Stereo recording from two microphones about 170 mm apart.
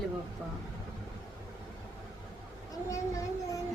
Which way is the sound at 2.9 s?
20° left (ahead or behind).